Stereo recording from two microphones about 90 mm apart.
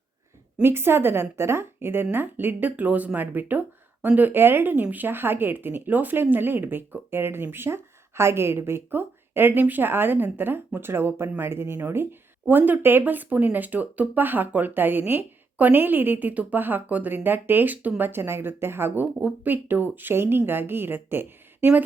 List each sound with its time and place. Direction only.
0.6 s speech: 25° right (ahead or behind)